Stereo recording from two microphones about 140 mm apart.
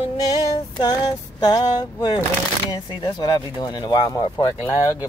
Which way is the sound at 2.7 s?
30° left (ahead or behind).